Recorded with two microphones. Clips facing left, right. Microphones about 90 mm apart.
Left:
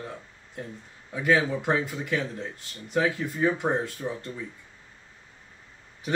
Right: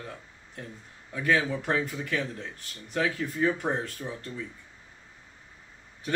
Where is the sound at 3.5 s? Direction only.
20° left (ahead or behind).